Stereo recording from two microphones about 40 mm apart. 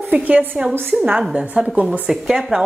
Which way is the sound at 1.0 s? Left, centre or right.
Right.